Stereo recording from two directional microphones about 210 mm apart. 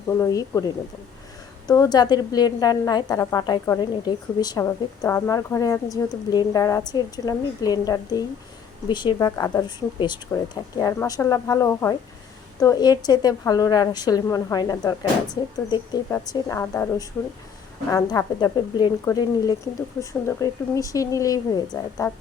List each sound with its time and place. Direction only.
0.1 s a woman's voice: 15° left (ahead or behind)
1.6 s a woman's voice: 15° left (ahead or behind)